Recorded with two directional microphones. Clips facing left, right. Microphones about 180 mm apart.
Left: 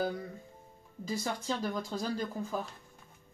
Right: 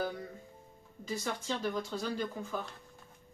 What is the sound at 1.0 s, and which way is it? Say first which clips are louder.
Speech: left 2 dB; 35° left (ahead or behind).